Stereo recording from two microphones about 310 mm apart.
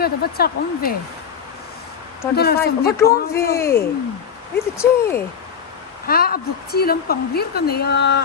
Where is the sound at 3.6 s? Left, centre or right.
Centre.